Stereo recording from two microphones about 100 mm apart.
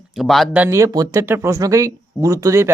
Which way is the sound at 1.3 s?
30° right (ahead or behind).